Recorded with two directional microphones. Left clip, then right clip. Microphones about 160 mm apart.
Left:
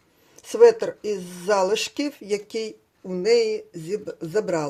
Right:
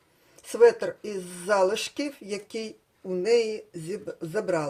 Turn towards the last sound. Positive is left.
turn(degrees=25)  # may be behind; listen again after turning